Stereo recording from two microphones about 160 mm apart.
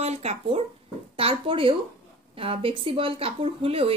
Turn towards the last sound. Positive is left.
turn(degrees=-35)  # may be behind; listen again after turning